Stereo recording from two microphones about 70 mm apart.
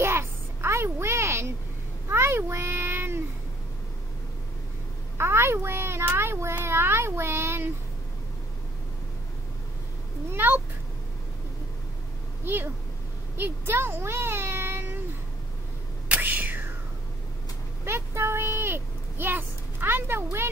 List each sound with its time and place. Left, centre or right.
0.0 s a sound: right
2.0 s meow: right
5.1 s speech: right
10.3 s cat: right
13.4 s a child's voice: right
16.1 s whispering: right
17.8 s a sound: right